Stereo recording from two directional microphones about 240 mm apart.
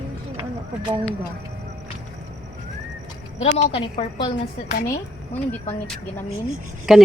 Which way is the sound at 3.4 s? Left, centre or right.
Left.